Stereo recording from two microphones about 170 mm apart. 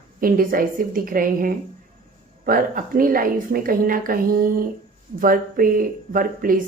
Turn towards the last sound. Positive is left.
turn(degrees=-55)  # may be behind; listen again after turning